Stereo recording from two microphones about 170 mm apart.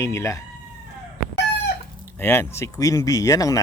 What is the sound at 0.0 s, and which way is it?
Speech, 15° left (ahead or behind).